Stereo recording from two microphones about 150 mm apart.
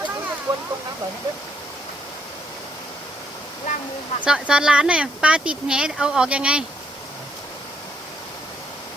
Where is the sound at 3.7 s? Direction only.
55° left (ahead or behind).